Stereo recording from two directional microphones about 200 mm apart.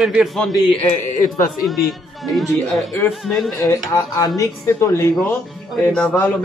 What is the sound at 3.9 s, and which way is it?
Speech, 15° left (ahead or behind).